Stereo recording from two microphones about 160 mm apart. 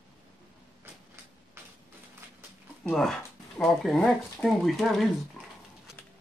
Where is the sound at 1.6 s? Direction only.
15° right (ahead or behind).